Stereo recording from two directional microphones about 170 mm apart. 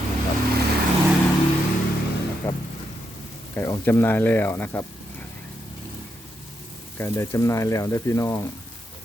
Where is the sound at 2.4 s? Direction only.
15° left (ahead or behind).